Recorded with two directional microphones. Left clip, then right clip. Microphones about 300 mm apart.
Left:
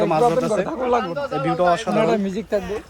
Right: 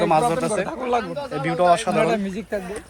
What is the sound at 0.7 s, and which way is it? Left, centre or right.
Speech, left.